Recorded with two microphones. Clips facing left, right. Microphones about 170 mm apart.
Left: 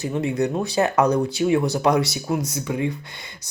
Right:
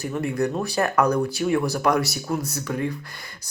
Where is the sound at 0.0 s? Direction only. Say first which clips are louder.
Left 2 dB; 20° left (ahead or behind).